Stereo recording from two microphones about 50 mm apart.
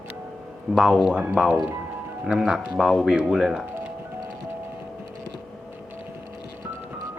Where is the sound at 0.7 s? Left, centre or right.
Centre.